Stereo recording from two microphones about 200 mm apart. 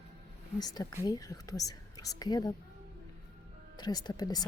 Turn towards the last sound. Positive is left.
turn(degrees=20)  # may be behind; listen again after turning